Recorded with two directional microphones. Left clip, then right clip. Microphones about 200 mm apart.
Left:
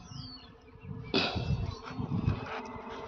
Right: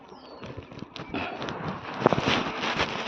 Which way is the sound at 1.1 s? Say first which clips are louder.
Left 3 dB; 75° left (ahead or behind).